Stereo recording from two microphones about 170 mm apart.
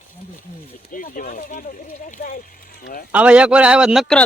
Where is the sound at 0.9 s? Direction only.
55° left (ahead or behind).